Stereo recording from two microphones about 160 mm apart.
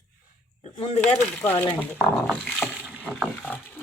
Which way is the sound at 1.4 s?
15° left (ahead or behind).